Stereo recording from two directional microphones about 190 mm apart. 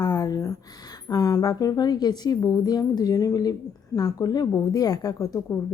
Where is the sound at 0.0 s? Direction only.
20° left (ahead or behind).